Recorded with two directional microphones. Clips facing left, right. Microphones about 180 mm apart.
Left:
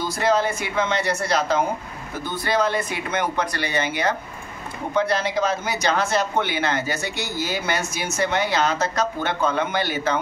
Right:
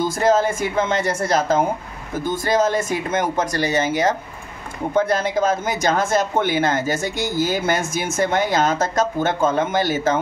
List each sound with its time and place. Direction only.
0.0 s speech: 45° right (ahead or behind)